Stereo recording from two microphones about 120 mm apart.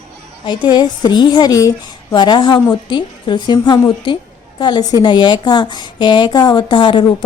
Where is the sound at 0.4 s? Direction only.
40° left (ahead or behind).